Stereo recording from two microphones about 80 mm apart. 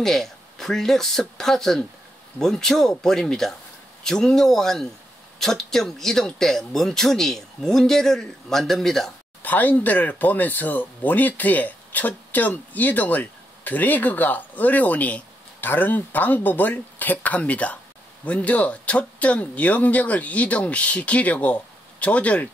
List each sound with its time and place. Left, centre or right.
0.0 s speech: centre
9.4 s speech: left